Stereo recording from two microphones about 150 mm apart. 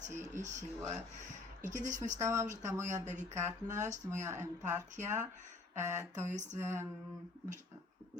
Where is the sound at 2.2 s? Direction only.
20° right (ahead or behind).